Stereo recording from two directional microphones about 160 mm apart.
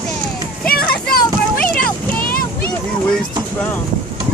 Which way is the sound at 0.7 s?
65° left (ahead or behind).